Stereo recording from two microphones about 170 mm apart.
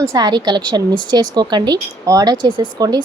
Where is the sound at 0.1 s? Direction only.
25° right (ahead or behind).